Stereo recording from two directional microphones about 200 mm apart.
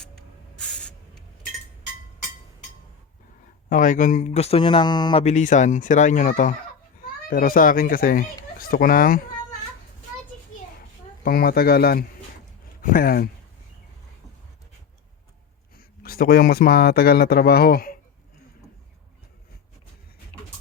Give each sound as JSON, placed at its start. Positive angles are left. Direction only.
{"t": 0.0, "sound": "spray", "side_deg": 5}
{"t": 3.7, "sound": "speech", "side_deg": 40}
{"t": 5.2, "sound": "a child's voice", "side_deg": 35}
{"t": 11.2, "sound": "a child's voice", "side_deg": 50}
{"t": 15.8, "sound": "speech", "side_deg": 45}